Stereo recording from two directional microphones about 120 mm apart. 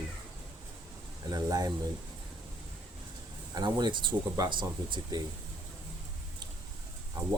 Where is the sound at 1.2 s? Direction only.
35° right (ahead or behind).